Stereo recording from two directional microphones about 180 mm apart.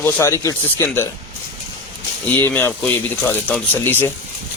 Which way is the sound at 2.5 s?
10° left (ahead or behind).